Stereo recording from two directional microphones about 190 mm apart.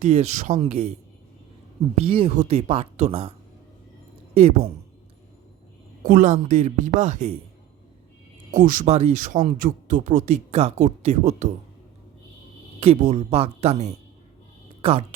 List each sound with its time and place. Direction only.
0.0 s speech: 35° right (ahead or behind)
2.0 s speech: 30° right (ahead or behind)
4.4 s speech: 35° right (ahead or behind)
6.0 s speech: 45° right (ahead or behind)
8.5 s speech: 45° right (ahead or behind)
12.8 s a woman's voice: 35° right (ahead or behind)